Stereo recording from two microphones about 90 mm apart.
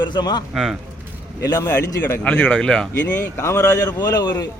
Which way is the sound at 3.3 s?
35° left (ahead or behind).